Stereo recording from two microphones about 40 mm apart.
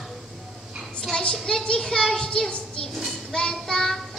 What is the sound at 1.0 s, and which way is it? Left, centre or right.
A child's voice, centre.